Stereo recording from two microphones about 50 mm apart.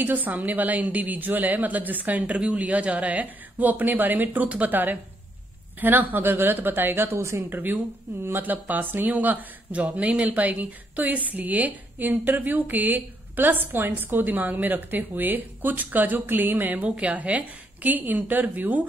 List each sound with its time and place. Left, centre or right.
0.0 s speech: right
7.2 s a woman's voice: right
7.4 s speech: right